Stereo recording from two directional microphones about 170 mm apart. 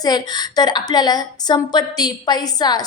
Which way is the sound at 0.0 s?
25° left (ahead or behind).